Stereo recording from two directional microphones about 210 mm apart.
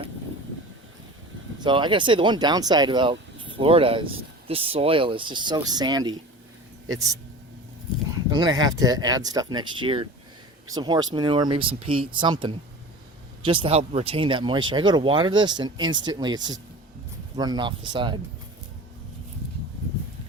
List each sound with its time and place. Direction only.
1.5 s speech: 20° right (ahead or behind)
8.3 s speech: 20° right (ahead or behind)